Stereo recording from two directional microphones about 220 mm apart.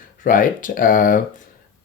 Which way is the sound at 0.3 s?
40° left (ahead or behind).